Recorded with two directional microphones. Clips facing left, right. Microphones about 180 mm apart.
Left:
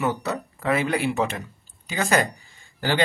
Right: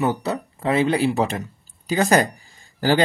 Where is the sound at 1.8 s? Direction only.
40° right (ahead or behind).